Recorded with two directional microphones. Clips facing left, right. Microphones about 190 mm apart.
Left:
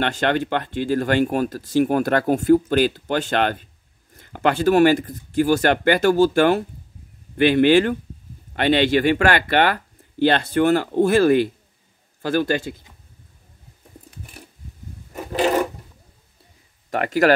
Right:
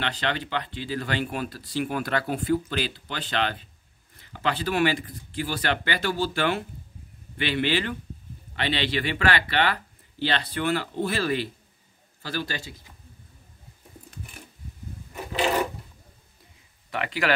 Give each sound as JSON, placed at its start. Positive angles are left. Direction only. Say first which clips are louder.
{"t": 0.0, "sound": "speech", "louder": "left 8 dB", "side_deg": 50}
{"t": 15.3, "sound": "a sound", "louder": "left 5 dB", "side_deg": 45}
{"t": 16.9, "sound": "speech", "louder": "left 10 dB", "side_deg": 45}